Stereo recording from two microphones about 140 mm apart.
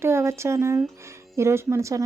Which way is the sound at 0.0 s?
20° right (ahead or behind).